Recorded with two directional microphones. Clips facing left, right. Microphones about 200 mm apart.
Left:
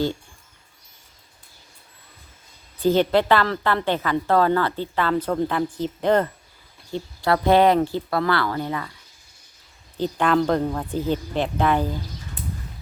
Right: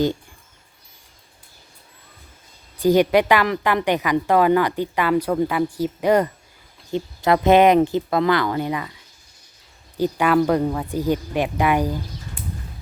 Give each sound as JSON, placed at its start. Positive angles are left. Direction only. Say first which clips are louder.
{"t": 2.8, "sound": "a woman's voice", "louder": "right 3 dB", "side_deg": -15}
{"t": 10.0, "sound": "a woman's voice", "louder": "right 2 dB", "side_deg": -10}